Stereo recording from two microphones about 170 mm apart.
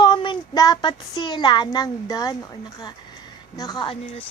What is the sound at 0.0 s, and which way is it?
A woman's voice, 30° left (ahead or behind).